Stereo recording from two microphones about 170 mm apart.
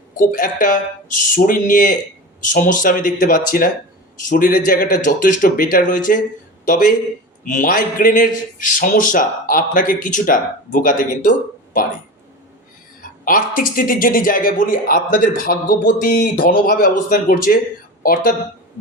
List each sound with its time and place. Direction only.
0.2 s a man's voice: 55° left (ahead or behind)
13.0 s speech: 55° left (ahead or behind)